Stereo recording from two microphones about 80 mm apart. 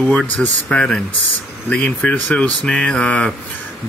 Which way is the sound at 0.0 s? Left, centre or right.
Centre.